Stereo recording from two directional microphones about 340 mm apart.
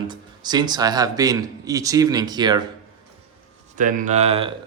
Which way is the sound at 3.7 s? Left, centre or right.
Right.